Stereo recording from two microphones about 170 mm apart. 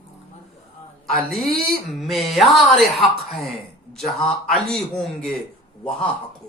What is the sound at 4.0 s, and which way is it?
A man's voice, centre (ahead or behind).